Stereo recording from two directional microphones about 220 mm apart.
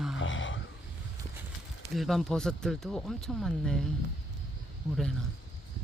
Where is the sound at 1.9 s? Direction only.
Centre (ahead or behind).